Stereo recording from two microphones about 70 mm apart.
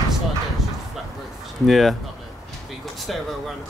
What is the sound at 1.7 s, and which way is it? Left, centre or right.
Speech, centre.